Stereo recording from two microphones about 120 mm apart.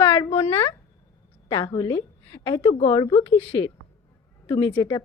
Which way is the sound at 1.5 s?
40° left (ahead or behind).